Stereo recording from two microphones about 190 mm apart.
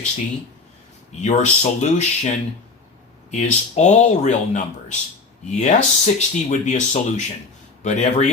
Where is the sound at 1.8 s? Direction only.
35° left (ahead or behind).